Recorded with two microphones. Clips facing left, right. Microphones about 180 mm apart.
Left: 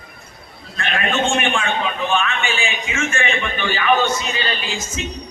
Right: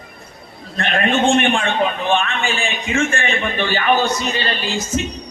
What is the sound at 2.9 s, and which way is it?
A woman's voice, 35° right (ahead or behind).